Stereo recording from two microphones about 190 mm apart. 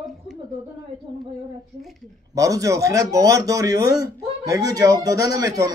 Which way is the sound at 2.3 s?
15° right (ahead or behind).